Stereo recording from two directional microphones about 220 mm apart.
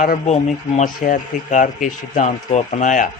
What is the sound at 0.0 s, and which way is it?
A man's voice, 35° left (ahead or behind).